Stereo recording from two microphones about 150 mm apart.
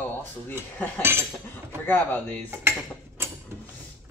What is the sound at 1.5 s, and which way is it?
Speech, 15° left (ahead or behind).